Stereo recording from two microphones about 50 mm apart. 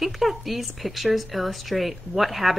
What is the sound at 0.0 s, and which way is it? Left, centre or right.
Speech, centre.